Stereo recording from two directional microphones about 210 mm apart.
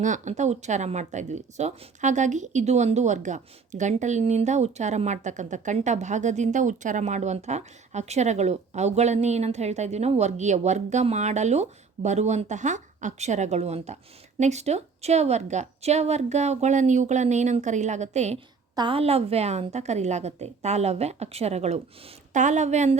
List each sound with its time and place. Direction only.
0.0 s speech: 35° right (ahead or behind)